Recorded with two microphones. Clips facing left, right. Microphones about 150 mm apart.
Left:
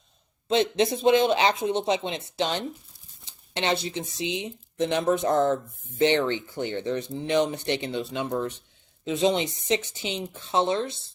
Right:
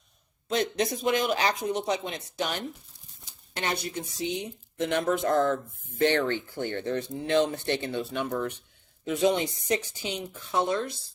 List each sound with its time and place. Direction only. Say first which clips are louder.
0.4 s speech: left 5 dB; 25° left (ahead or behind)